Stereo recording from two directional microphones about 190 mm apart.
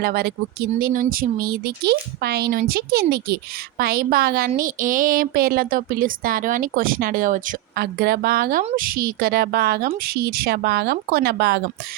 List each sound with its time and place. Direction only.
0.0 s speech: 55° right (ahead or behind)